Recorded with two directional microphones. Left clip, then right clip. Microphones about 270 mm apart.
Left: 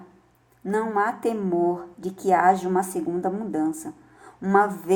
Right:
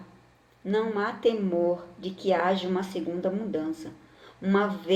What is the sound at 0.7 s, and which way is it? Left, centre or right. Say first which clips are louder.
Speech: left 4 dB; left.